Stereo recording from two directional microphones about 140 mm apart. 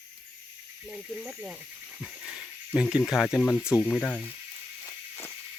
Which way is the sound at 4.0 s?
10° left (ahead or behind).